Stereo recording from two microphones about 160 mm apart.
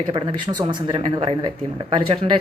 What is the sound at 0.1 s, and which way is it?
Speech, 30° right (ahead or behind).